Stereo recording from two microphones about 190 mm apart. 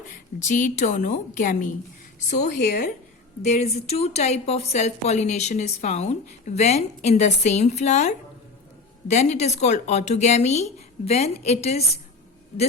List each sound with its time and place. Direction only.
0.3 s speech: 40° left (ahead or behind)
3.4 s speech: 35° left (ahead or behind)